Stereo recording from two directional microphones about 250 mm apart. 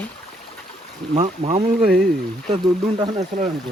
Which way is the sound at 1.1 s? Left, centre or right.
Right.